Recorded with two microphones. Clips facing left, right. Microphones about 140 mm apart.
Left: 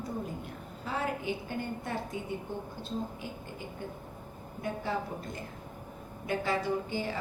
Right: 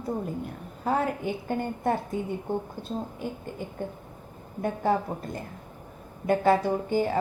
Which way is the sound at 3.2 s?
50° right (ahead or behind).